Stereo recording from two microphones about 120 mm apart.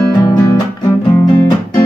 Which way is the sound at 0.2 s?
35° left (ahead or behind).